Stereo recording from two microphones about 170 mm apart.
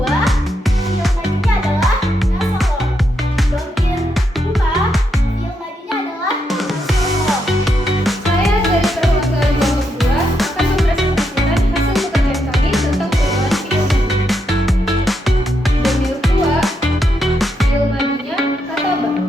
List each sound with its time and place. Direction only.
0.0 s music: centre (ahead or behind)
1.6 s music: centre (ahead or behind)
6.5 s music: centre (ahead or behind)